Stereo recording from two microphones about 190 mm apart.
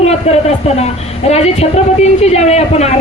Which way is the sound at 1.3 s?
35° left (ahead or behind).